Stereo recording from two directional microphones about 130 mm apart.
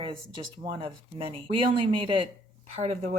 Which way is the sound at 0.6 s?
40° right (ahead or behind).